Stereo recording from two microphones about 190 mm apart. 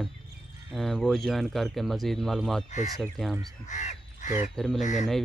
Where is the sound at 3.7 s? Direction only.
40° left (ahead or behind).